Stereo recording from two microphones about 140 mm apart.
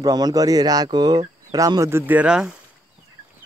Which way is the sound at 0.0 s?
25° right (ahead or behind).